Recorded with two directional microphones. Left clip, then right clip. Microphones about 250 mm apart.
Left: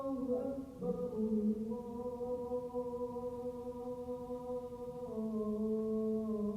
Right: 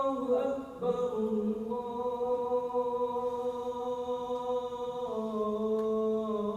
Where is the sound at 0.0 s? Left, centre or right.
Right.